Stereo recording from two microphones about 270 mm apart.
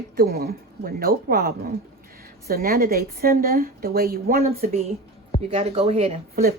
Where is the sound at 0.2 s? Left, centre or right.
Right.